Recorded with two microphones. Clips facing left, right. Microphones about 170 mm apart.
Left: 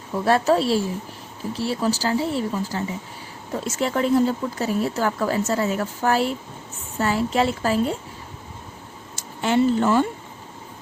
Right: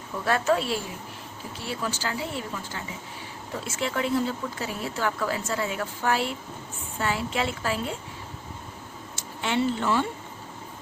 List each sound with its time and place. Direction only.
0.3 s speech: 35° left (ahead or behind)
9.1 s speech: 40° left (ahead or behind)